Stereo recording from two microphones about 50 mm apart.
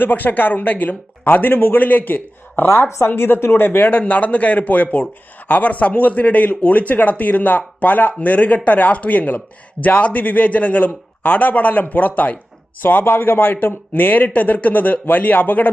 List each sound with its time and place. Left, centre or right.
0.0 s a man's voice: left